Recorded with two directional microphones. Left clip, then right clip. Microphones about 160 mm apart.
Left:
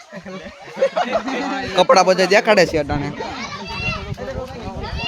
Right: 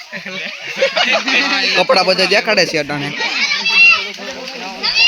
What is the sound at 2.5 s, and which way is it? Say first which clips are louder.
Speech: even; 25° left (ahead or behind).